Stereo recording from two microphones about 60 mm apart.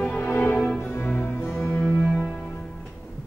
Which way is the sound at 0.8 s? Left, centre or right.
Left.